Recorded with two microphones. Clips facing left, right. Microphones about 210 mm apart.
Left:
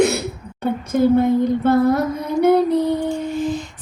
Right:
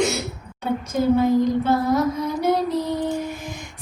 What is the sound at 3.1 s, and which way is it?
Humming, 10° right (ahead or behind).